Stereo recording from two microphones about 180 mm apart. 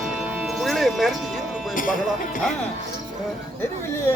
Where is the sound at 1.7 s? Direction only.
50° left (ahead or behind).